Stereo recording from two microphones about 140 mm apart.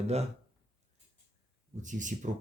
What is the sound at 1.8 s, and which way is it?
Speech, 65° right (ahead or behind).